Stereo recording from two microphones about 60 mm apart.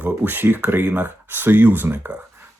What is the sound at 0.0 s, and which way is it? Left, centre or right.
Speech, right.